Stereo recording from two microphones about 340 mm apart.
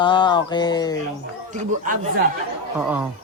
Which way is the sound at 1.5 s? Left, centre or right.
Right.